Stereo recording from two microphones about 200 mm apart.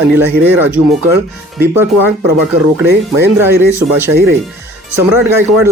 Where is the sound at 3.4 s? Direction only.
10° right (ahead or behind).